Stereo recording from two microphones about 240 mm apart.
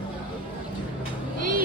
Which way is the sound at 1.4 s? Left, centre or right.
Right.